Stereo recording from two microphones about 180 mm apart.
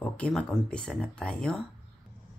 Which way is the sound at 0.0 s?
5° left (ahead or behind).